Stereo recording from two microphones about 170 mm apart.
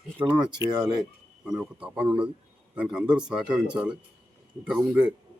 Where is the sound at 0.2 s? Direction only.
30° right (ahead or behind).